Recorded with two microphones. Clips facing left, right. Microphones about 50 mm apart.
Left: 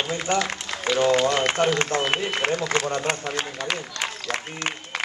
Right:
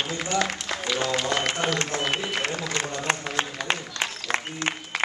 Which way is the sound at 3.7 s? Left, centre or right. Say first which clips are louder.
Right 3 dB; right.